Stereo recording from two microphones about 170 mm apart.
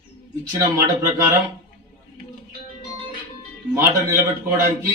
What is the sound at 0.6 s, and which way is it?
Speech, 15° right (ahead or behind).